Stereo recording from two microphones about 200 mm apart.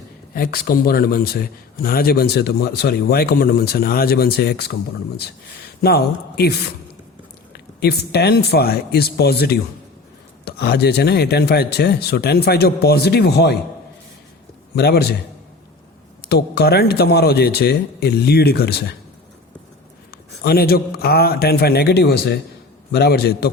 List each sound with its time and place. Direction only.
0.3 s a man's voice: 50° left (ahead or behind)
7.5 s a man's voice: 50° left (ahead or behind)
14.8 s a man's voice: 50° left (ahead or behind)
16.3 s a man's voice: 55° left (ahead or behind)
20.4 s a man's voice: 50° left (ahead or behind)